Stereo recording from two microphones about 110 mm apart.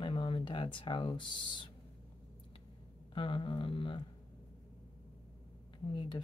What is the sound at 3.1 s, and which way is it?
Speech, 50° left (ahead or behind).